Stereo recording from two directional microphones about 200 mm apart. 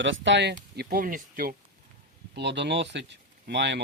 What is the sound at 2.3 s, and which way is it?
Speech, 60° right (ahead or behind).